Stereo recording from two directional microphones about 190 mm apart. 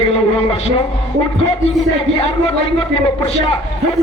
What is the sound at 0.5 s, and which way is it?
Speech, 35° left (ahead or behind).